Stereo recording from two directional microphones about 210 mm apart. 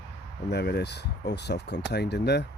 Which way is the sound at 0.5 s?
50° left (ahead or behind).